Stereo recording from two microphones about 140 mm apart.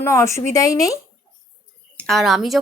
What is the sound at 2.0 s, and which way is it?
Speech, centre (ahead or behind).